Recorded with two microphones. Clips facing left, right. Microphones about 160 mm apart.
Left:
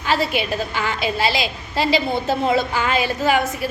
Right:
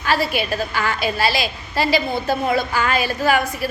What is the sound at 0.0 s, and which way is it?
A woman's voice, 20° left (ahead or behind).